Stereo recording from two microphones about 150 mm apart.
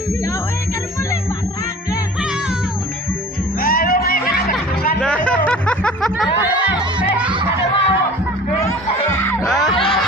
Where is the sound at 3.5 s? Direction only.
70° left (ahead or behind).